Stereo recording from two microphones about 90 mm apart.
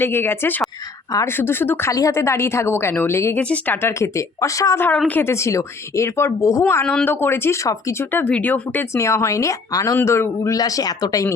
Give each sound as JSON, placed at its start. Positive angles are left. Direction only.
{"t": 0.0, "sound": "a woman's voice", "side_deg": 25}
{"t": 1.9, "sound": "a woman's voice", "side_deg": 40}
{"t": 4.9, "sound": "speech", "side_deg": 20}
{"t": 5.3, "sound": "speech", "side_deg": 35}
{"t": 6.8, "sound": "speech", "side_deg": 10}
{"t": 7.1, "sound": "a woman's voice", "side_deg": 25}
{"t": 8.1, "sound": "speech", "side_deg": 15}
{"t": 8.9, "sound": "speech", "side_deg": 30}